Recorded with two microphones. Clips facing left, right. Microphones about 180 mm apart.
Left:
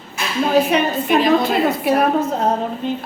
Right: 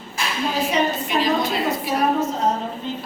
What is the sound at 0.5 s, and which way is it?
A woman's voice, 60° left (ahead or behind).